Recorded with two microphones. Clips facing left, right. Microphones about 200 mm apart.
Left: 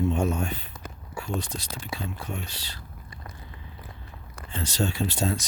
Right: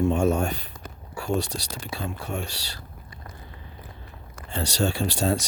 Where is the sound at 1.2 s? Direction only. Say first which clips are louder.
Right 6 dB; 75° right (ahead or behind).